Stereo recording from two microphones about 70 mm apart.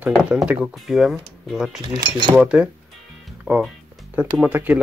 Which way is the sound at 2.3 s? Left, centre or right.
Centre.